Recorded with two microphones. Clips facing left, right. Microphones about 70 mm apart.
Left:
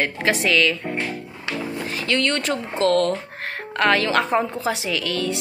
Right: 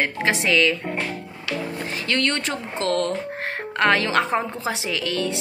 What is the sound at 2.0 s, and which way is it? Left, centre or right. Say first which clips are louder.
A woman's voice: left 2 dB; right.